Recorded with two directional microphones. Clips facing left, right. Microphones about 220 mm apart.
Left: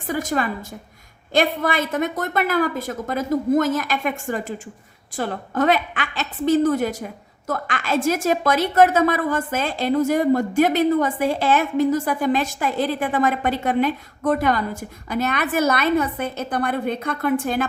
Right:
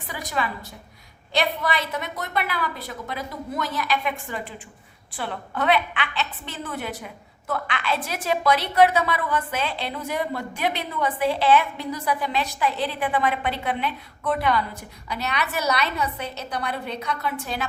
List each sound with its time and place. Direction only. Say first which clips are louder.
0.1 s a woman's voice: left 6 dB; 45° left (ahead or behind)